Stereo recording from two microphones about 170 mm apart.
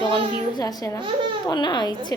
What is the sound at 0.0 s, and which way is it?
A woman's voice, 25° left (ahead or behind).